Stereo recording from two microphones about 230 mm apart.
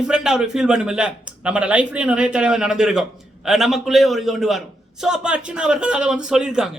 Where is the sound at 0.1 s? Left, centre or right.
Centre.